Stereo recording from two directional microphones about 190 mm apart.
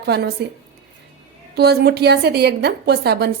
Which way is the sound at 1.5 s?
60° right (ahead or behind).